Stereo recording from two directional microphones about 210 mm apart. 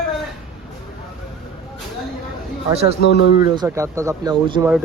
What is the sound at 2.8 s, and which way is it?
Speech, 55° left (ahead or behind).